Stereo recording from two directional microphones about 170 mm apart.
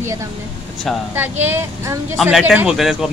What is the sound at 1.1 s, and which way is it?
A man's voice, 10° right (ahead or behind).